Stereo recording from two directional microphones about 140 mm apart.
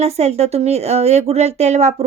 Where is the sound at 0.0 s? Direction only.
50° right (ahead or behind).